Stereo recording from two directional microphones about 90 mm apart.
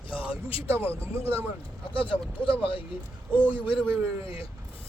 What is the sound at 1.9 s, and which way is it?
Speech, 75° left (ahead or behind).